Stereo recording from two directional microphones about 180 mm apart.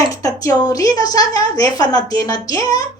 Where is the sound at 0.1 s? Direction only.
20° left (ahead or behind).